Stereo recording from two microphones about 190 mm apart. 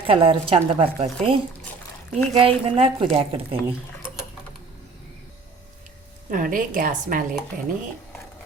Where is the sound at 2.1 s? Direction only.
30° right (ahead or behind).